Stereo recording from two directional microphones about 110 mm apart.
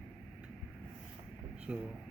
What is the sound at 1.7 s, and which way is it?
Speech, 15° right (ahead or behind).